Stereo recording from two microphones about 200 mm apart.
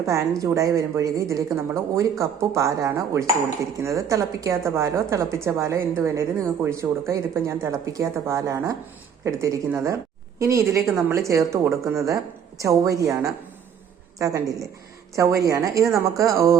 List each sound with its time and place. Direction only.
0.0 s a woman's voice: 15° right (ahead or behind)